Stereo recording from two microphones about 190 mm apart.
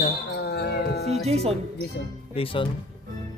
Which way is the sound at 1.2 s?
35° right (ahead or behind).